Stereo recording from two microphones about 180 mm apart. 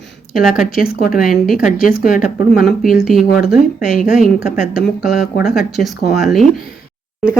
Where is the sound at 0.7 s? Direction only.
55° left (ahead or behind).